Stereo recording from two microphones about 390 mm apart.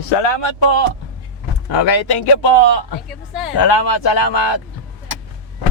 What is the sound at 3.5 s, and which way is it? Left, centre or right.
Speech, left.